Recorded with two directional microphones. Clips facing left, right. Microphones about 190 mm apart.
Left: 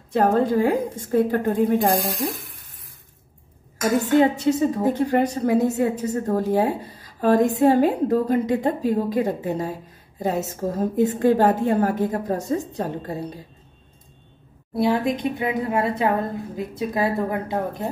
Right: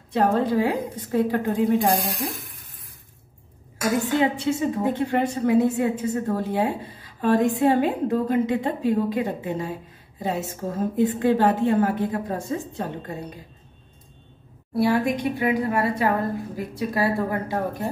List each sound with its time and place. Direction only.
0.1 s a woman's voice: 45° left (ahead or behind)
4.2 s a woman's voice: 40° left (ahead or behind)
14.8 s a woman's voice: 20° left (ahead or behind)